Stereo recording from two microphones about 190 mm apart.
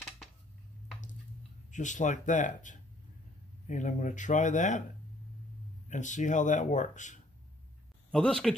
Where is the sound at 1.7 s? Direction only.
40° left (ahead or behind).